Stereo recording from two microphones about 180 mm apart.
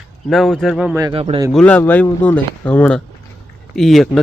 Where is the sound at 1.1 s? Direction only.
30° right (ahead or behind).